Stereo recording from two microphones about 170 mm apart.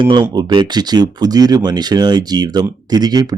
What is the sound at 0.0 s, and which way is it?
Speech, 25° right (ahead or behind).